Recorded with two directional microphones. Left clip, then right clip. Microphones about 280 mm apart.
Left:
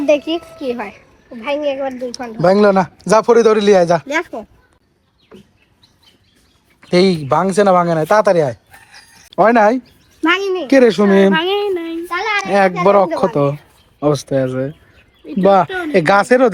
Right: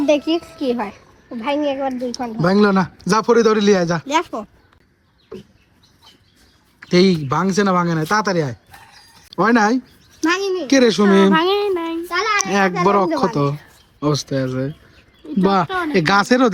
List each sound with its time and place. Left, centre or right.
0.0 s a child's voice: right
2.4 s a man's voice: centre
6.8 s a man's voice: centre
10.2 s a sound: centre
11.3 s a child's voice: right
11.6 s child singing: centre
12.5 s a man's voice: centre